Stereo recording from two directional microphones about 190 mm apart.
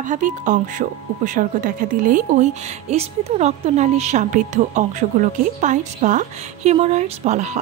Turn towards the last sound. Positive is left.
turn(degrees=-35)  # may be behind; listen again after turning